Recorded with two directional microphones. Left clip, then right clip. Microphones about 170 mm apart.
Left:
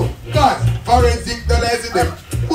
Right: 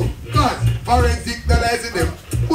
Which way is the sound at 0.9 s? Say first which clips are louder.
Left 4 dB; 20° right (ahead or behind).